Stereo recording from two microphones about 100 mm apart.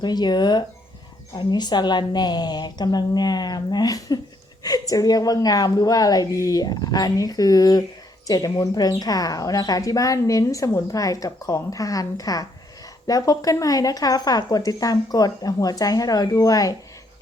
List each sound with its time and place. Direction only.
0.0 s a woman's voice: 45° left (ahead or behind)